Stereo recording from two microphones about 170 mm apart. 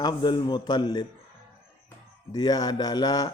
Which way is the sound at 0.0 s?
25° left (ahead or behind).